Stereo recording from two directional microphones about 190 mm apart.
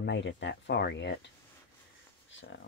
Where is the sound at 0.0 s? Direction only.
70° left (ahead or behind).